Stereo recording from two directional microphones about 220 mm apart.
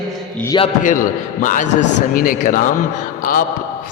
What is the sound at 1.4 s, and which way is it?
A man's voice, 35° left (ahead or behind).